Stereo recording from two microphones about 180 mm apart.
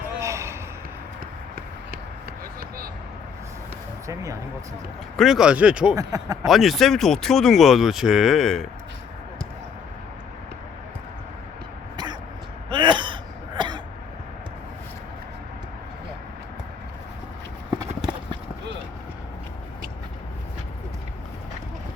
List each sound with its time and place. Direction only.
0.2 s basketball bounce: 15° right (ahead or behind)
2.6 s a sound: 55° right (ahead or behind)
4.0 s speech: 15° right (ahead or behind)
5.1 s speech: centre (ahead or behind)
6.0 s speech: 20° right (ahead or behind)
6.4 s speech: centre (ahead or behind)
12.7 s a sound: 25° right (ahead or behind)
13.6 s cough: 25° right (ahead or behind)